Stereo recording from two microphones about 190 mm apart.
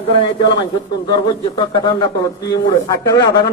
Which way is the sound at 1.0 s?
25° left (ahead or behind).